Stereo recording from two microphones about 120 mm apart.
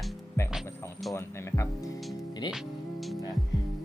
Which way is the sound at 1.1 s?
25° left (ahead or behind).